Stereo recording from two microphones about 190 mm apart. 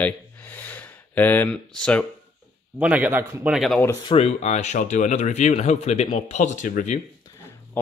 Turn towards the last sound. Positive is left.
turn(degrees=10)  # may be behind; listen again after turning